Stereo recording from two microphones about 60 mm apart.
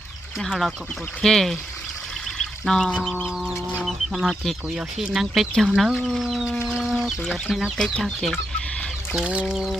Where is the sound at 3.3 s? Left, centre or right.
Centre.